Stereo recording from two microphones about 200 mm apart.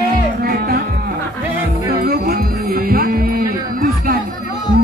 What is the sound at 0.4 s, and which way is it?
Music, 50° right (ahead or behind).